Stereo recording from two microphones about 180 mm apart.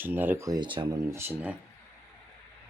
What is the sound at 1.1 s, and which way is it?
Speech, 15° right (ahead or behind).